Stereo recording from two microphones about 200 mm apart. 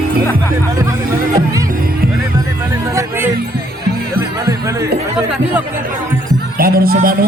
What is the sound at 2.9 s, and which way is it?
Music, 10° right (ahead or behind).